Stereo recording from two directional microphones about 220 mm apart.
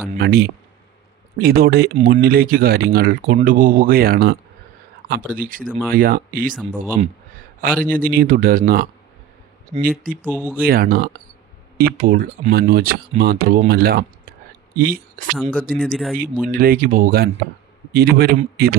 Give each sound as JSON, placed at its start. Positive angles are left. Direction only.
{"t": 0.2, "sound": "a man's voice", "side_deg": -45}
{"t": 10.2, "sound": "speech", "side_deg": -10}
{"t": 10.6, "sound": "a man's voice", "side_deg": -40}
{"t": 15.4, "sound": "speech", "side_deg": 5}
{"t": 16.5, "sound": "a man's voice", "side_deg": -40}